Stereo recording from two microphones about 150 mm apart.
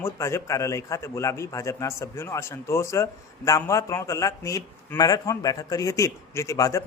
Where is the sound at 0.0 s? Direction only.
20° left (ahead or behind).